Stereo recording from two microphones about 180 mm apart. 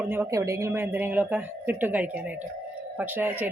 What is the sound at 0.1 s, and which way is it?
A woman's voice, 15° right (ahead or behind).